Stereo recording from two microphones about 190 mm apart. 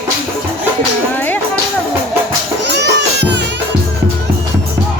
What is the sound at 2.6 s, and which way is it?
Music, 65° right (ahead or behind).